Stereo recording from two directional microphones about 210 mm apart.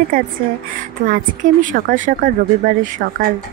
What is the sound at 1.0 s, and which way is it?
Speech, 40° right (ahead or behind).